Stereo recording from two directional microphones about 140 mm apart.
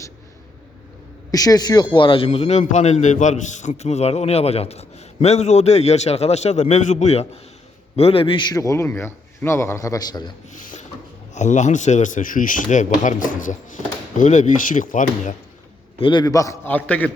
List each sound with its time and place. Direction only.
1.3 s a man's voice: 25° left (ahead or behind)
10.5 s a sound: 65° left (ahead or behind)
11.3 s speech: 60° left (ahead or behind)
16.0 s a man's voice: 35° left (ahead or behind); by 17.1 s 10° left (ahead or behind)